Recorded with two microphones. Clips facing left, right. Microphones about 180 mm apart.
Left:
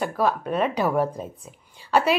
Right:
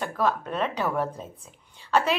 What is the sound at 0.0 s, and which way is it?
A woman's voice, 10° left (ahead or behind).